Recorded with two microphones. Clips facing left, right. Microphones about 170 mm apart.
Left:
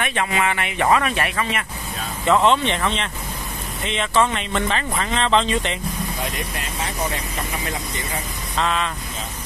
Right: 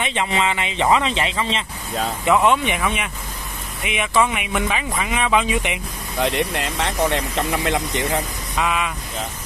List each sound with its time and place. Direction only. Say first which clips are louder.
0.0 s speech: even; 20° right (ahead or behind)
2.2 s speech: left 1 dB; 10° right (ahead or behind)
6.2 s speech: right 7 dB; 85° right
8.5 s speech: even; 10° right (ahead or behind)